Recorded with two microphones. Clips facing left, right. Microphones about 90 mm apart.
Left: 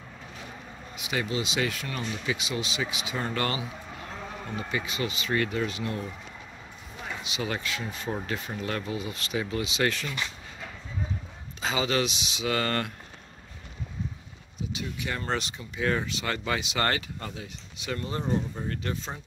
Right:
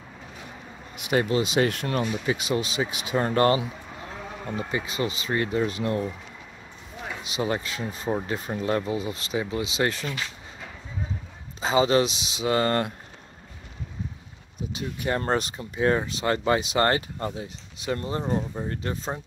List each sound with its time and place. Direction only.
1.1 s speech: 45° right (ahead or behind)
2.2 s speech: 40° right (ahead or behind)
3.6 s sheep: 5° right (ahead or behind)
4.6 s speech: 30° right (ahead or behind)
7.3 s speech: 30° right (ahead or behind)
8.4 s speech: 35° right (ahead or behind)
9.4 s speech: 20° right (ahead or behind)
9.7 s speech: 30° right (ahead or behind)
11.6 s speech: 30° right (ahead or behind)
14.7 s speech: 40° right (ahead or behind)
18.5 s speech: 15° right (ahead or behind)